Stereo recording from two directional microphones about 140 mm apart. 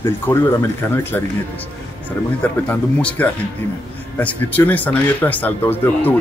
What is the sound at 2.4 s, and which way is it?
Speech, 10° left (ahead or behind).